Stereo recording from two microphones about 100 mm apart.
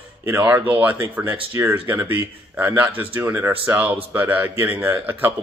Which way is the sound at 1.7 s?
15° right (ahead or behind).